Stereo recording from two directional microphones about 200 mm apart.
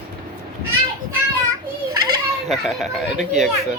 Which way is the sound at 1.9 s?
20° right (ahead or behind).